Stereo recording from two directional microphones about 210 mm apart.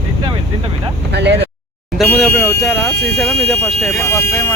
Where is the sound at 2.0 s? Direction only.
Centre (ahead or behind).